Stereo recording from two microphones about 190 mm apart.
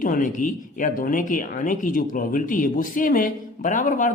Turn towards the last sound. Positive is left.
turn(degrees=45)  # may be behind; listen again after turning